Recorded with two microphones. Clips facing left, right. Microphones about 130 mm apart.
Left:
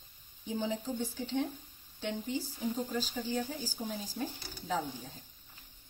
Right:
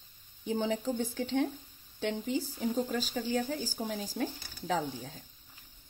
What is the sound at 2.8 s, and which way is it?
A woman's voice, 65° right (ahead or behind).